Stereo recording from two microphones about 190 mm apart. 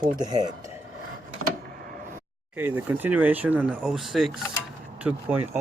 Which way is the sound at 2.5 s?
10° right (ahead or behind).